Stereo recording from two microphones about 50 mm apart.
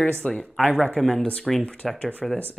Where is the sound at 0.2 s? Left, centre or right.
Left.